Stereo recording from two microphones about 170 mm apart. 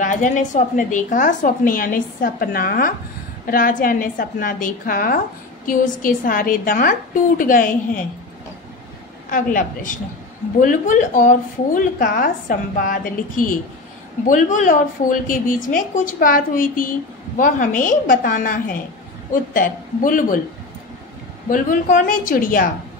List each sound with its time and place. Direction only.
0.0 s a woman's voice: 50° left (ahead or behind)
9.3 s a woman's voice: 55° left (ahead or behind)
21.5 s a woman's voice: 50° left (ahead or behind)